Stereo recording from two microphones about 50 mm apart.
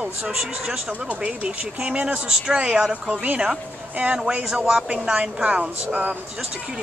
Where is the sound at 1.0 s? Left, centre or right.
Right.